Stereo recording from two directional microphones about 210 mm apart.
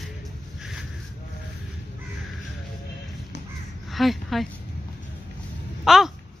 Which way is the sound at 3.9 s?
Centre (ahead or behind).